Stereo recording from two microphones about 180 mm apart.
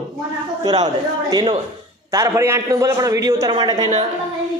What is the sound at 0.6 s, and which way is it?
A man's voice, 20° right (ahead or behind).